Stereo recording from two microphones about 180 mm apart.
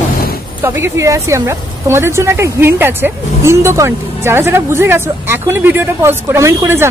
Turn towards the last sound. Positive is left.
turn(degrees=-15)  # may be behind; listen again after turning